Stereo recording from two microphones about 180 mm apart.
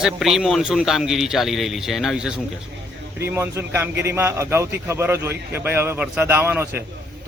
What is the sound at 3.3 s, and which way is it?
A man's voice, 15° right (ahead or behind).